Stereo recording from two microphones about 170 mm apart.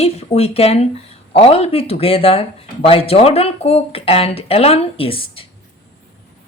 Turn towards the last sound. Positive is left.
turn(degrees=30)  # may be behind; listen again after turning